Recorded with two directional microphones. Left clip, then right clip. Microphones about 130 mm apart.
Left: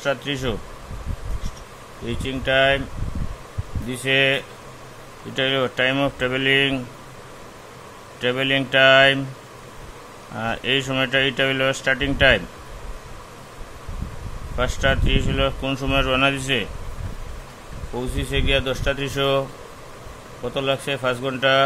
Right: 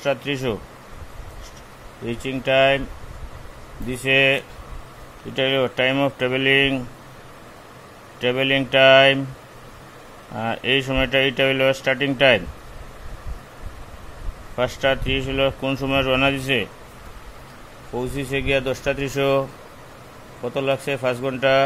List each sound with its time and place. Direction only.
0.0 s speech: 30° right (ahead or behind)
2.0 s speech: 30° right (ahead or behind)
3.8 s speech: 30° right (ahead or behind)
8.2 s speech: 30° right (ahead or behind)
10.3 s speech: 25° right (ahead or behind)
14.6 s speech: 30° right (ahead or behind)
17.9 s speech: 30° right (ahead or behind)
20.4 s speech: 25° right (ahead or behind)